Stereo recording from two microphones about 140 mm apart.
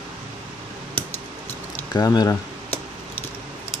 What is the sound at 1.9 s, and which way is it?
Speech, 25° left (ahead or behind).